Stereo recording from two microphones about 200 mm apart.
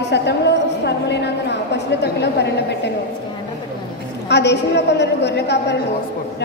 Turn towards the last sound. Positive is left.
turn(degrees=60)  # may be behind; listen again after turning